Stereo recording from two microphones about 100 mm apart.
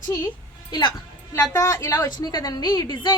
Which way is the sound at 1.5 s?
35° left (ahead or behind).